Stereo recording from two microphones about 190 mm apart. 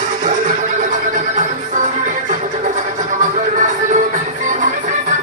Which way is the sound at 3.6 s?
40° right (ahead or behind).